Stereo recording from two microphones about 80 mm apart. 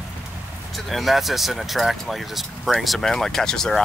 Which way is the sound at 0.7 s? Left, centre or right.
Centre.